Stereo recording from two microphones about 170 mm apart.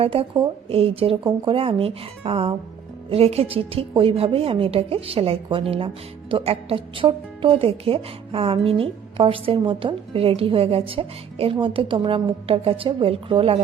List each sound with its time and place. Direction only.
0.0 s a woman's voice: 35° right (ahead or behind)